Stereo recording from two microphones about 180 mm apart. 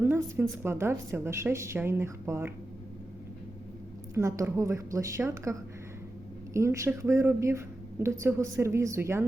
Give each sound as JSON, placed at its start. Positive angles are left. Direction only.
{"t": 0.0, "sound": "a sound", "side_deg": -10}
{"t": 0.6, "sound": "a woman's voice", "side_deg": -15}
{"t": 4.1, "sound": "a woman's voice", "side_deg": -15}